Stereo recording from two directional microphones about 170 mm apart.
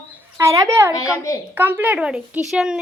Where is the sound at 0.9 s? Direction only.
20° left (ahead or behind).